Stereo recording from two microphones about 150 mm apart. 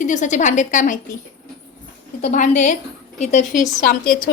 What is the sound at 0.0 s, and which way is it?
Speech, 55° left (ahead or behind).